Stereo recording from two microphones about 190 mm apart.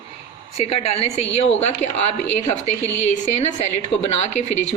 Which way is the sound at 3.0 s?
35° left (ahead or behind).